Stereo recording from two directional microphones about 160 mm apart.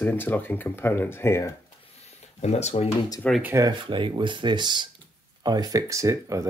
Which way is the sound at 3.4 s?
15° right (ahead or behind).